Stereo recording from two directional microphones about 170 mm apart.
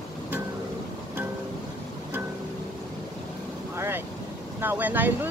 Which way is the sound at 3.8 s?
10° right (ahead or behind).